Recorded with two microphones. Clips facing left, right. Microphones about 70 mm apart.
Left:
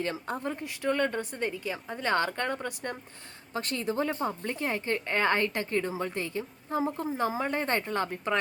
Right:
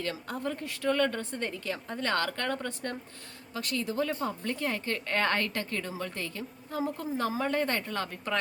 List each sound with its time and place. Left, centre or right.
0.0 s speech: left
3.5 s a woman's voice: left